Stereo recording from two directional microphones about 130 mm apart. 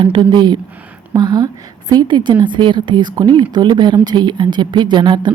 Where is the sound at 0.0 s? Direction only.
35° right (ahead or behind).